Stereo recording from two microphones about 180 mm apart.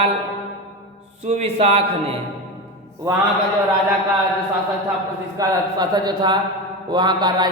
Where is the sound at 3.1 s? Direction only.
15° right (ahead or behind).